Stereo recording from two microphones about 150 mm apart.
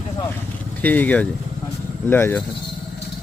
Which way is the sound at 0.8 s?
10° left (ahead or behind).